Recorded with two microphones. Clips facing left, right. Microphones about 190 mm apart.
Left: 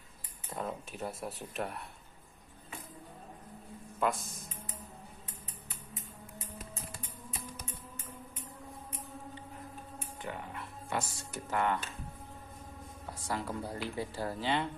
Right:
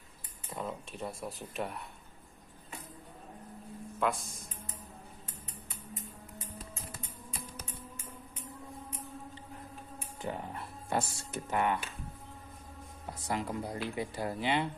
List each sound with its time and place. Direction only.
0.5 s speech: centre (ahead or behind)
4.0 s speech: centre (ahead or behind)
10.2 s speech: 35° right (ahead or behind); by 11.9 s 15° right (ahead or behind)
13.3 s speech: 20° right (ahead or behind)